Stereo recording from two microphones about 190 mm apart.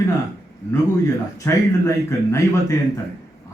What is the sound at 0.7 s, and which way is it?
Speech, 15° left (ahead or behind).